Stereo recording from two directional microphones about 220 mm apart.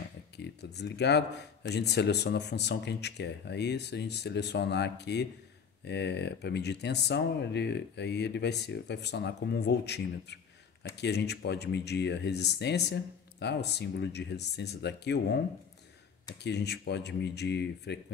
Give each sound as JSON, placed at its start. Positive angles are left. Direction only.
{"t": 0.4, "sound": "speech", "side_deg": 50}
{"t": 16.4, "sound": "speech", "side_deg": 50}